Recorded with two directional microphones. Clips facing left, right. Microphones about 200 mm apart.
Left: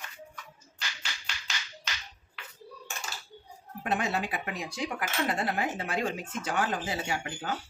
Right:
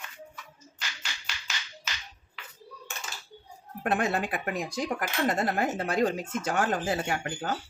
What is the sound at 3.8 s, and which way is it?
Speech, 50° right (ahead or behind).